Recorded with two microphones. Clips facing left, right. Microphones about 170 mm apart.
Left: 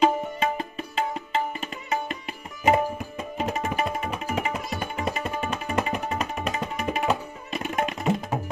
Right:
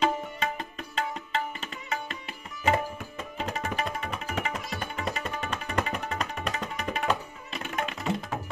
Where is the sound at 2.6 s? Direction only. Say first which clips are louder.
Left 5 dB; 15° left (ahead or behind).